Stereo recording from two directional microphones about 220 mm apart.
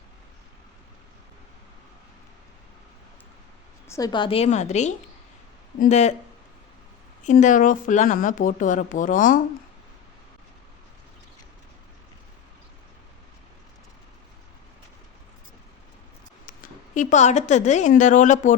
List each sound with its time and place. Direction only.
3.8 s a woman's voice: 15° left (ahead or behind); by 6.1 s 30° left (ahead or behind)
7.3 s speech: 35° left (ahead or behind)
16.5 s a woman's voice: 35° left (ahead or behind)